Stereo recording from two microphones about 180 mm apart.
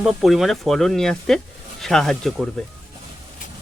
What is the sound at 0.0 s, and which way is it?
Speech, centre (ahead or behind).